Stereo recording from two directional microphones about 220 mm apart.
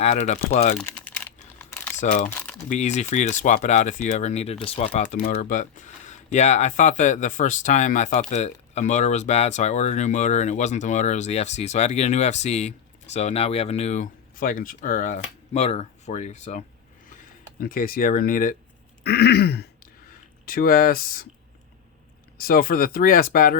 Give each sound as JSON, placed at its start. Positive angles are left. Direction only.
{"t": 0.0, "sound": "speech", "side_deg": 30}
{"t": 0.8, "sound": "crumpling", "side_deg": 5}
{"t": 2.0, "sound": "speech", "side_deg": 35}
{"t": 2.3, "sound": "crumpling", "side_deg": 5}
{"t": 2.6, "sound": "speech", "side_deg": 30}
{"t": 19.0, "sound": "throat clearing", "side_deg": 45}
{"t": 20.4, "sound": "speech", "side_deg": 40}
{"t": 22.4, "sound": "speech", "side_deg": 40}